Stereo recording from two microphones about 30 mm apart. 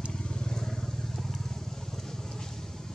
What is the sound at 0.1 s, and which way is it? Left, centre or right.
Vehicle, left.